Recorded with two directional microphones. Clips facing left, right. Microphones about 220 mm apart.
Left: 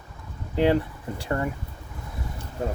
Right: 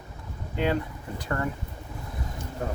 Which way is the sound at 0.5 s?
30° left (ahead or behind).